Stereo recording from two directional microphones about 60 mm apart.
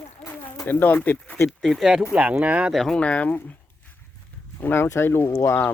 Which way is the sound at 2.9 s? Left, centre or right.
Left.